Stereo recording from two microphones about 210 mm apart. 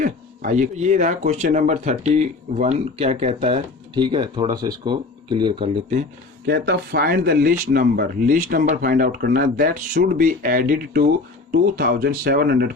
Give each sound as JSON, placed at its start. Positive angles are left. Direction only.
{"t": 0.0, "sound": "speech", "side_deg": -40}
{"t": 6.4, "sound": "speech", "side_deg": -45}